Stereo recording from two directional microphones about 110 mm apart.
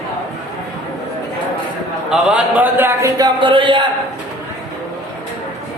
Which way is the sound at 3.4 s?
50° right (ahead or behind).